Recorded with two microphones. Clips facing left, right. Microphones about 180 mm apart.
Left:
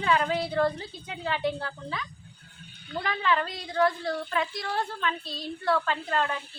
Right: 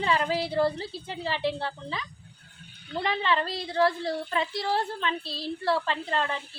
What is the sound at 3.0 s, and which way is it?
A woman's voice, 30° right (ahead or behind).